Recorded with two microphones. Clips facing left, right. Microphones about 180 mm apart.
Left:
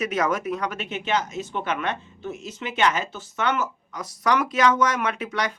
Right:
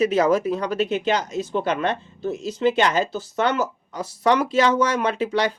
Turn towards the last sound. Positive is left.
turn(degrees=-30)  # may be behind; listen again after turning